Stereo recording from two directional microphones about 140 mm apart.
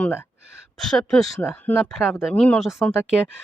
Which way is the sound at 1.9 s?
Centre (ahead or behind).